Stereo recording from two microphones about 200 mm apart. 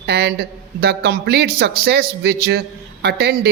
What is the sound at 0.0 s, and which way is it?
A man's voice, 55° right (ahead or behind).